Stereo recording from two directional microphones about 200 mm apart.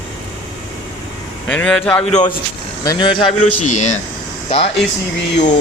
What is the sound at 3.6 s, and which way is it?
Speech, 35° left (ahead or behind).